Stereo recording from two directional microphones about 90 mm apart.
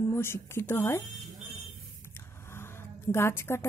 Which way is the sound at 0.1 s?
30° left (ahead or behind).